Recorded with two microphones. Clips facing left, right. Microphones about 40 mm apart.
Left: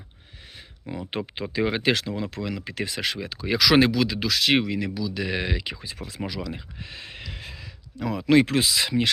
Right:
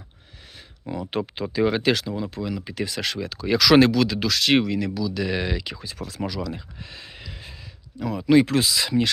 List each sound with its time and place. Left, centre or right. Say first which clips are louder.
1.4 s speech: right 3 dB; left
2.0 s speech: right 1 dB; left
2.2 s speech: right 1 dB; left
3.0 s speech: right 1 dB; centre; by 7.3 s left
7.3 s a sound: left 2 dB; left
7.9 s speech: even; left
8.2 s speech: right 1 dB; left
8.4 s speech: right 1 dB; left